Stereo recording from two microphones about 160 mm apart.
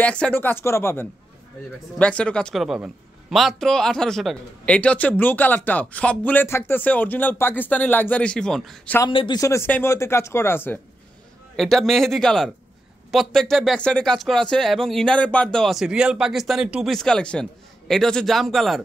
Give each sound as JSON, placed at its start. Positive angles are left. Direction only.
{"t": 0.0, "sound": "a man's voice", "side_deg": 10}
{"t": 9.0, "sound": "a man's voice", "side_deg": 30}
{"t": 9.4, "sound": "a man's voice", "side_deg": 15}
{"t": 11.5, "sound": "speech", "side_deg": 0}